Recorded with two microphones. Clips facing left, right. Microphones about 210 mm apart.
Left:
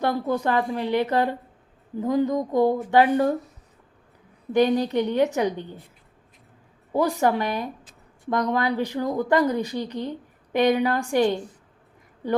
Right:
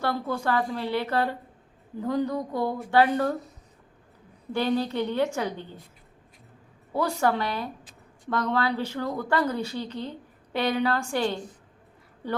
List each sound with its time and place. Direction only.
0.0 s a woman's voice: 20° left (ahead or behind)
4.5 s a woman's voice: 15° left (ahead or behind)
6.9 s a woman's voice: 15° left (ahead or behind)